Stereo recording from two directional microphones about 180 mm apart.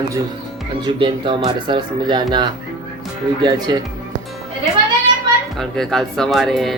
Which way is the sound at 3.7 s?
25° right (ahead or behind).